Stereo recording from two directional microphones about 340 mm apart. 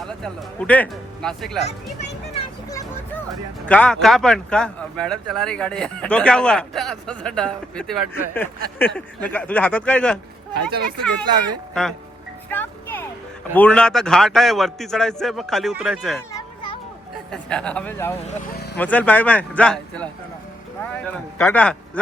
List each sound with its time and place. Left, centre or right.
0.0 s speech: centre
1.6 s a sound: centre
3.7 s speech: centre
10.7 s speech: right
11.7 s speech: centre
12.5 s music: centre
13.5 s speech: centre
17.3 s speech: centre
18.5 s vehicle: left
18.8 s speech: centre
21.3 s speech: centre